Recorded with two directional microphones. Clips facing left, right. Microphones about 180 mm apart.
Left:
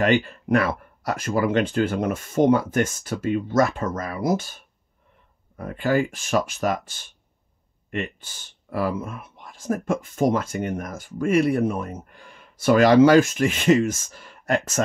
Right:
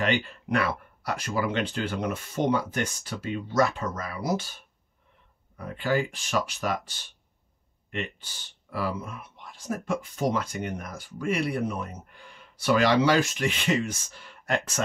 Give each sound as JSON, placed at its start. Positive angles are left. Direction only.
{"t": 0.0, "sound": "speech", "side_deg": 45}
{"t": 5.6, "sound": "speech", "side_deg": 50}